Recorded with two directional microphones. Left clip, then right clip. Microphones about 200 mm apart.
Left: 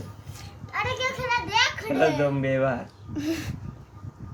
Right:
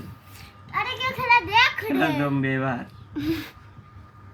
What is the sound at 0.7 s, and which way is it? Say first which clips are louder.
Children playing: right 1 dB; 25° left (ahead or behind).